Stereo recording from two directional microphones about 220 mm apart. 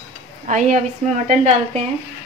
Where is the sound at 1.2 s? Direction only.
35° right (ahead or behind).